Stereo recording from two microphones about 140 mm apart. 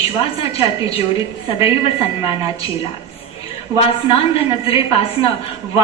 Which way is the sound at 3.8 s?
40° left (ahead or behind).